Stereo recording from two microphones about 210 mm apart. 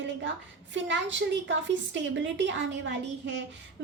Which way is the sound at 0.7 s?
60° right (ahead or behind).